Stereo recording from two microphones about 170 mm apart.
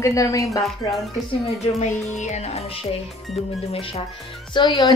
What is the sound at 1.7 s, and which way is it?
Music, 45° left (ahead or behind).